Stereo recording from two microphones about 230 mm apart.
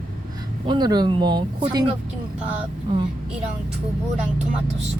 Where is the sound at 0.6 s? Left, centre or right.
Centre.